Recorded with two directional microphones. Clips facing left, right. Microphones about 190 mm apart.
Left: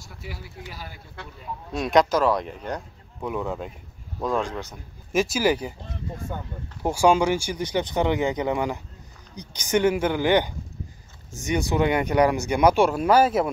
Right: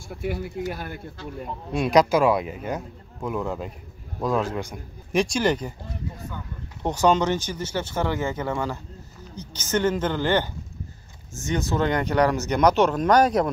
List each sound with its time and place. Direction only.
0.1 s speech: 55° right (ahead or behind)
1.8 s a man's voice: centre (ahead or behind)
5.1 s a man's voice: 5° left (ahead or behind)
6.8 s speech: 10° left (ahead or behind)